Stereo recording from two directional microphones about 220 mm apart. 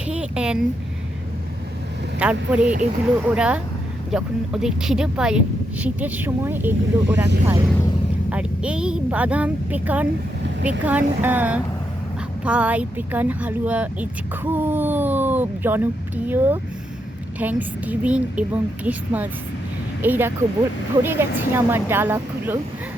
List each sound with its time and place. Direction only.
0.1 s speech: 5° right (ahead or behind)
2.1 s speech: 5° right (ahead or behind)